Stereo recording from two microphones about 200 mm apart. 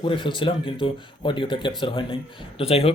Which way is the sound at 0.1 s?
25° left (ahead or behind).